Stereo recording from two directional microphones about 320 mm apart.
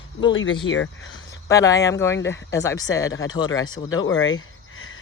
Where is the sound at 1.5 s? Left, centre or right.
Centre.